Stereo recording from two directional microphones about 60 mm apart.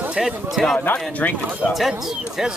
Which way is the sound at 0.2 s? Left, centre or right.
Centre.